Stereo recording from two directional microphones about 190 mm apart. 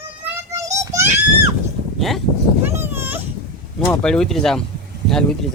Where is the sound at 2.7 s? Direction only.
10° right (ahead or behind).